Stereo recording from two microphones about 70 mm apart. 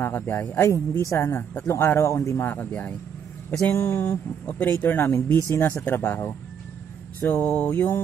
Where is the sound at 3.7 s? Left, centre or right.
Left.